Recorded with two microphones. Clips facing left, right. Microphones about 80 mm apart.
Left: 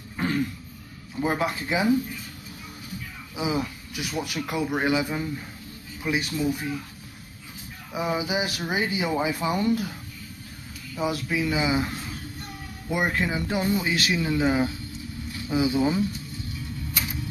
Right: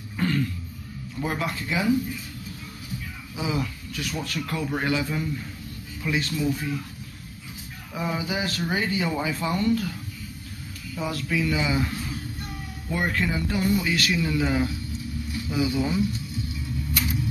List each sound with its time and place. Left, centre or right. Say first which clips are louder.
0.2 s throat clearing: even; centre
1.1 s speech: left 3 dB; left
3.3 s speech: left 1 dB; centre
7.9 s speech: left 2 dB; centre
11.0 s speech: left 1 dB; centre